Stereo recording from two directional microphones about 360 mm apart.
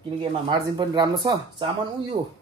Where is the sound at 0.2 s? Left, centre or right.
Centre.